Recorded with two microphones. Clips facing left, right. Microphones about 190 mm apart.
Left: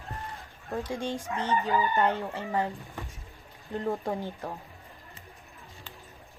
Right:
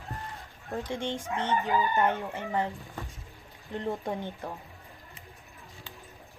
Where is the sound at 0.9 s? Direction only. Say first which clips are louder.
Right 1 dB; 25° right (ahead or behind).